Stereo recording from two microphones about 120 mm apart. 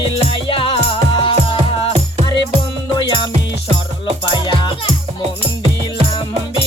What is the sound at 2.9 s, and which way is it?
Music, 40° left (ahead or behind).